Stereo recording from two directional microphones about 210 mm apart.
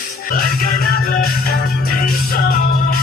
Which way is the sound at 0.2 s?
45° left (ahead or behind).